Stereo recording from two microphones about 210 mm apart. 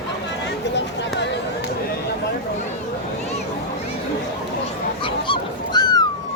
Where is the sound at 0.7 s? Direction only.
55° left (ahead or behind).